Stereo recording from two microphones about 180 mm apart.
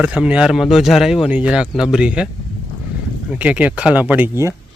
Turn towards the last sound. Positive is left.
turn(degrees=-10)  # may be behind; listen again after turning